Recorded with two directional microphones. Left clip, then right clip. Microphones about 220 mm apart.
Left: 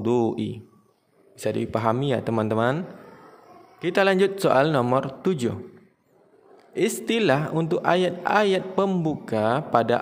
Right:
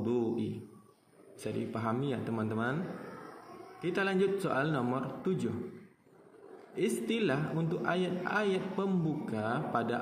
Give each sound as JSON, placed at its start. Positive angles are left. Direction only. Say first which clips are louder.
{"t": 0.0, "sound": "a man's voice", "louder": "left 10 dB", "side_deg": 50}
{"t": 3.8, "sound": "a man's voice", "louder": "left 11 dB", "side_deg": 50}
{"t": 6.7, "sound": "a man's voice", "louder": "left 9 dB", "side_deg": 50}